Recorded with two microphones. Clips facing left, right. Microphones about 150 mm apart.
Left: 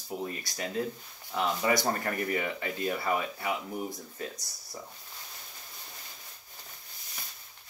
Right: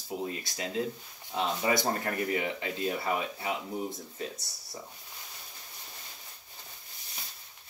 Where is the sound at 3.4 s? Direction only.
25° right (ahead or behind).